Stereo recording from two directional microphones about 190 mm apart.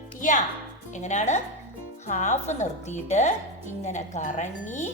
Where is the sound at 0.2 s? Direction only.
40° left (ahead or behind).